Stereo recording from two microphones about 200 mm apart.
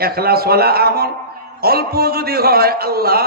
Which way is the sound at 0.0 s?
50° right (ahead or behind).